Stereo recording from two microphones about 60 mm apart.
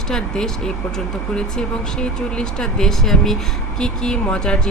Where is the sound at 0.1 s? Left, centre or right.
Centre.